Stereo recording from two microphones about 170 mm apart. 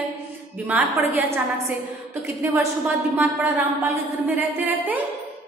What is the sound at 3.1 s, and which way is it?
A woman's voice, 10° right (ahead or behind).